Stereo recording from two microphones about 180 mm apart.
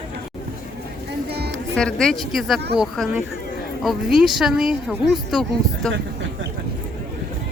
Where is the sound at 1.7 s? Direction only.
5° left (ahead or behind).